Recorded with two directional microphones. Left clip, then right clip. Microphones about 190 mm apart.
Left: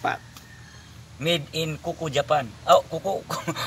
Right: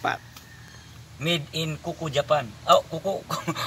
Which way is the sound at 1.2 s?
15° left (ahead or behind).